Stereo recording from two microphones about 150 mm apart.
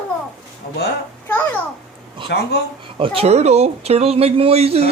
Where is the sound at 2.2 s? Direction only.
35° right (ahead or behind).